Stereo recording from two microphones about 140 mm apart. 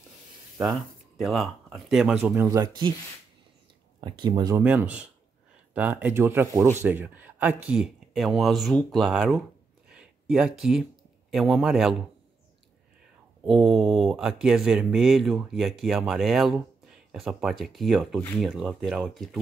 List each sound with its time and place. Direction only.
0.6 s speech: centre (ahead or behind)
2.4 s speech: 25° right (ahead or behind)
4.0 s speech: 30° right (ahead or behind)
4.6 s speech: 10° right (ahead or behind)
13.5 s speech: 5° right (ahead or behind)